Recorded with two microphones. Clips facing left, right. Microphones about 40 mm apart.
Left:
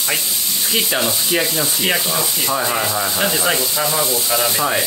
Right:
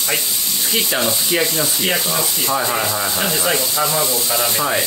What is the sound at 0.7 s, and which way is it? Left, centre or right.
Sanding, centre.